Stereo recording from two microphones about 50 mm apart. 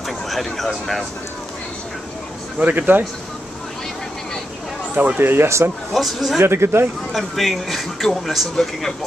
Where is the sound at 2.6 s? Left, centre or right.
Right.